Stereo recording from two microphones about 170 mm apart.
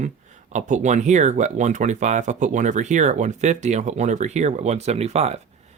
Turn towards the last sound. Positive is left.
turn(degrees=-40)  # may be behind; listen again after turning